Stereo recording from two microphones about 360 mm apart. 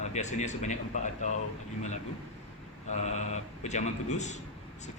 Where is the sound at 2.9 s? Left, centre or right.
Centre.